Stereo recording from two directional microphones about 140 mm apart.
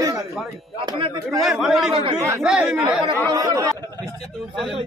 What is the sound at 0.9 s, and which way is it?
Speech, 40° right (ahead or behind).